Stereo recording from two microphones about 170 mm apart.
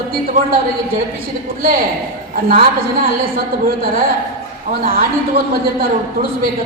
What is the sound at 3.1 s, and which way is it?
A man's voice, 60° right (ahead or behind).